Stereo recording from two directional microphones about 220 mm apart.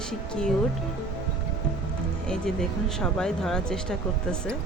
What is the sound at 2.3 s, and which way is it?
Speech, centre (ahead or behind).